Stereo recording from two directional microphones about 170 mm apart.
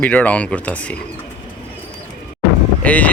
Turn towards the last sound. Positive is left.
turn(degrees=10)  # may be behind; listen again after turning